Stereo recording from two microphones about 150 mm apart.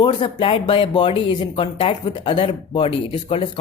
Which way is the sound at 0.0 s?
30° left (ahead or behind).